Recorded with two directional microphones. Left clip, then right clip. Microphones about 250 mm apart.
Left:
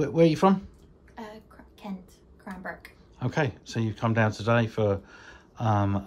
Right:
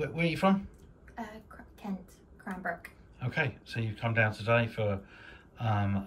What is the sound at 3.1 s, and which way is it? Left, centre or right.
Speech, centre.